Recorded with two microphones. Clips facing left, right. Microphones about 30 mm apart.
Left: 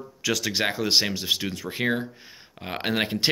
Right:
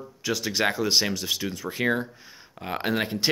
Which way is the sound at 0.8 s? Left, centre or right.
Left.